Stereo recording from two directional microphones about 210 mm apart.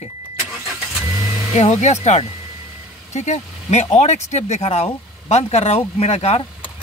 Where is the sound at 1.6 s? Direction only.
35° left (ahead or behind).